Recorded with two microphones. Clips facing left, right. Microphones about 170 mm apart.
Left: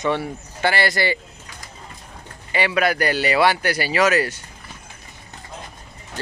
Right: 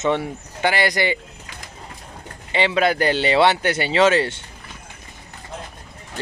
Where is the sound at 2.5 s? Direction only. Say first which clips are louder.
Right 1 dB; 25° right (ahead or behind).